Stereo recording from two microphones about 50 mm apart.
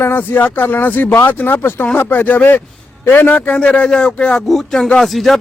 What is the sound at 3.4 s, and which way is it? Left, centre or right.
Speech, left.